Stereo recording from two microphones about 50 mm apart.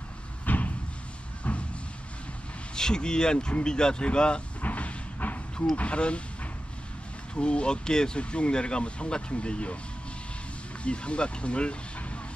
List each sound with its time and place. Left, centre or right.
0.5 s slam: left
2.7 s speech: centre
4.6 s a sound: left
5.8 s speech: left
7.3 s speech: left
10.8 s speech: left